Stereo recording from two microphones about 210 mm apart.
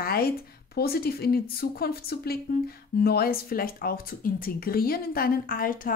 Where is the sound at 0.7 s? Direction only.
45° left (ahead or behind).